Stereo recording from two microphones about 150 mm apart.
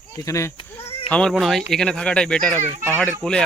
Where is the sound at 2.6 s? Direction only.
50° right (ahead or behind).